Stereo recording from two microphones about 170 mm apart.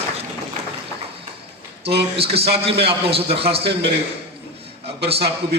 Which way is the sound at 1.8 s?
35° right (ahead or behind).